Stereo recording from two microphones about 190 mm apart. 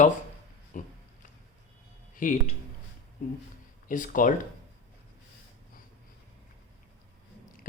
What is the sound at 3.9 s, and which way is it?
Speech, 45° left (ahead or behind).